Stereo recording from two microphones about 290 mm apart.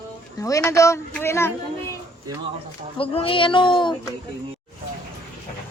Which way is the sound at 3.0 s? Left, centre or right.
Centre.